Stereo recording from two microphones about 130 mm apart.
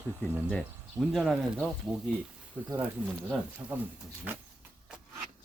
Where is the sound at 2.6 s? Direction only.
15° right (ahead or behind).